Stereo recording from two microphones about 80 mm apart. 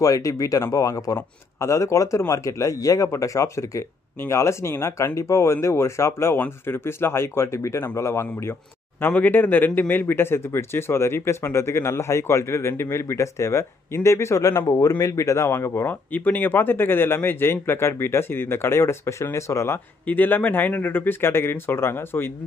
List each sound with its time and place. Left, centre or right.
0.0 s a man's voice: left
20.1 s speech: left